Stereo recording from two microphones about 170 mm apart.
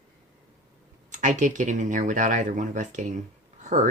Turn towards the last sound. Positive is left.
turn(degrees=-45)  # may be behind; listen again after turning